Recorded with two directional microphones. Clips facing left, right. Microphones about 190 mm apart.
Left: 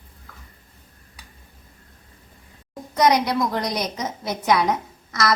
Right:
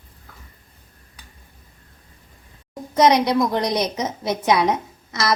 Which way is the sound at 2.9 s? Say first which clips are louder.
Right 3 dB; 25° right (ahead or behind).